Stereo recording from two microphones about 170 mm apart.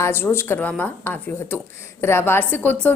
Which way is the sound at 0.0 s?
15° left (ahead or behind).